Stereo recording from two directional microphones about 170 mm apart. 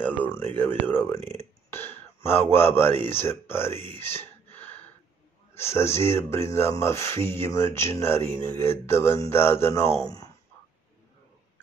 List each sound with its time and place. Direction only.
0.0 s a sound: 10° left (ahead or behind)
0.6 s speech: 10° left (ahead or behind)
1.7 s a sound: 15° left (ahead or behind)
2.5 s speech: 15° left (ahead or behind)
4.6 s gasp: 10° left (ahead or behind)
5.5 s speech: 15° left (ahead or behind)